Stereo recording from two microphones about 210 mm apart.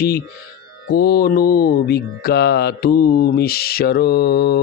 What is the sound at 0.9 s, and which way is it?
Speech, 45° left (ahead or behind).